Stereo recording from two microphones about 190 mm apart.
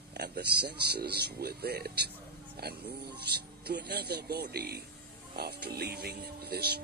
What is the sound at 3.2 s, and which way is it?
Speech, 60° right (ahead or behind).